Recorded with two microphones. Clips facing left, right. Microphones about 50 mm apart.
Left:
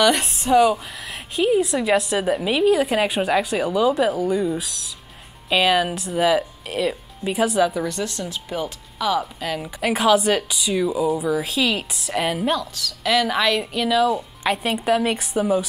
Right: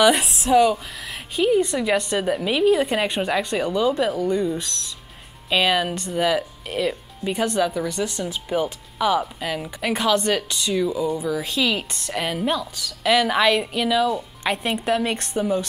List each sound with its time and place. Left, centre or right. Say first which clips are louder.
0.0 s speech: right 1 dB; centre
8.0 s speech: right 1 dB; centre
9.2 s speech: even; centre